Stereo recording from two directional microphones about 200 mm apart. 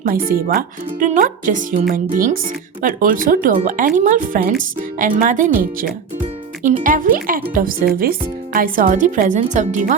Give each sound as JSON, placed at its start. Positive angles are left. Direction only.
{"t": 0.3, "sound": "speech", "side_deg": -45}